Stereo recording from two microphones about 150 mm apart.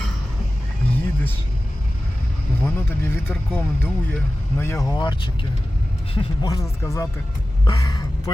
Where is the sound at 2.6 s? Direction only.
15° left (ahead or behind).